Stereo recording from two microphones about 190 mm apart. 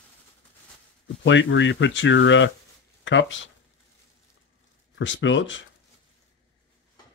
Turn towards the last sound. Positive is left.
turn(degrees=80)